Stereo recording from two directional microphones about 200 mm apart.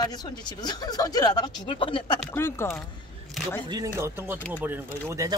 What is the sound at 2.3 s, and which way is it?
Speech, 10° left (ahead or behind).